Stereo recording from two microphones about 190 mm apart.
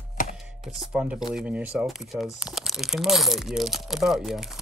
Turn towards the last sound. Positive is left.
turn(degrees=0)  # may be behind; listen again after turning